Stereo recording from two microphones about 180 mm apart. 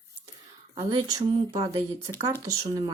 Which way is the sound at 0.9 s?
20° right (ahead or behind).